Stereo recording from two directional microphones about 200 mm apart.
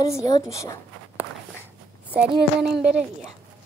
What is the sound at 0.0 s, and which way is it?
Speech, 15° left (ahead or behind).